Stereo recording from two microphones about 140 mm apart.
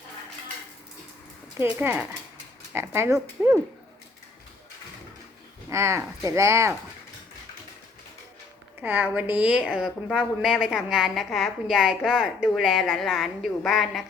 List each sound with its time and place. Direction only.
1.5 s speech: 15° right (ahead or behind)
5.7 s speech: 20° right (ahead or behind)
8.8 s a woman's voice: 15° right (ahead or behind)